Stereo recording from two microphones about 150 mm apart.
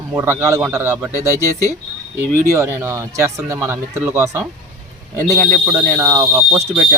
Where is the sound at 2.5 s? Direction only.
15° right (ahead or behind).